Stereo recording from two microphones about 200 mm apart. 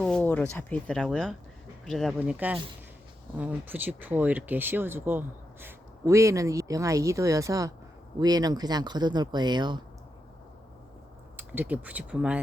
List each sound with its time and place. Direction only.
0.0 s a sound: 5° left (ahead or behind)
0.5 s speech: 5° left (ahead or behind); by 9.8 s 20° right (ahead or behind)
11.3 s speech: 10° right (ahead or behind)